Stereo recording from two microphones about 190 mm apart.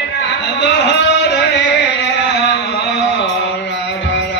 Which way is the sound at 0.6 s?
60° left (ahead or behind).